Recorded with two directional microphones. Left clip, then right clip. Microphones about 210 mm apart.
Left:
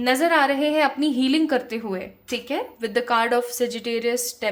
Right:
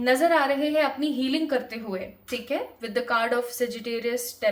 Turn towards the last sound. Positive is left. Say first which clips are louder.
# left 2 dB
turn(degrees=40)  # may be behind; listen again after turning